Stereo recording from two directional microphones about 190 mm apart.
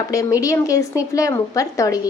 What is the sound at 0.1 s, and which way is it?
A woman's voice, 15° left (ahead or behind).